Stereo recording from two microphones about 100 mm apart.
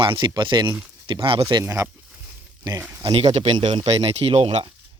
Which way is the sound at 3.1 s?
90° right.